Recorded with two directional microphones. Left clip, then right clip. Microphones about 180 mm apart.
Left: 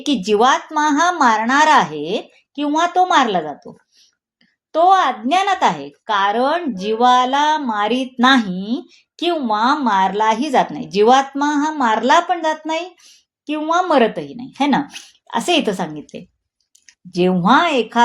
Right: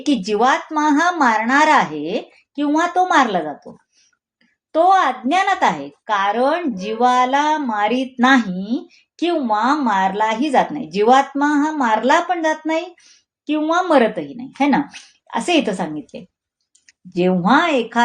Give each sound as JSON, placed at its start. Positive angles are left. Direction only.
{"t": 0.0, "sound": "a woman's voice", "side_deg": 30}
{"t": 4.7, "sound": "a woman's voice", "side_deg": 30}